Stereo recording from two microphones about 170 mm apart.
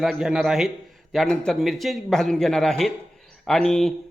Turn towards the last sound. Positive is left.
turn(degrees=5)  # may be behind; listen again after turning